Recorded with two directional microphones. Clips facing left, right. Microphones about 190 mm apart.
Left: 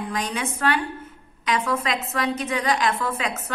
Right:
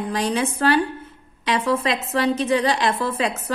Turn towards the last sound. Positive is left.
turn(degrees=-30)  # may be behind; listen again after turning